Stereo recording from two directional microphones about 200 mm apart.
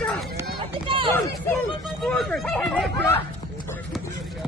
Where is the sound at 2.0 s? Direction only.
5° left (ahead or behind).